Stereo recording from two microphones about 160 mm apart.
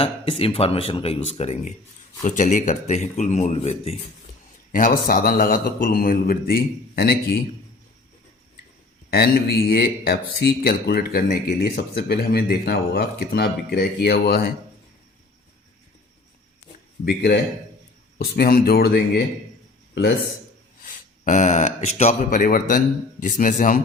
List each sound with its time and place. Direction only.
0.0 s speech: 35° left (ahead or behind)
4.7 s a man's voice: 60° left (ahead or behind); by 7.2 s 80° left
9.0 s speech: 80° left
17.1 s speech: 80° left
20.8 s a man's voice: 50° left (ahead or behind)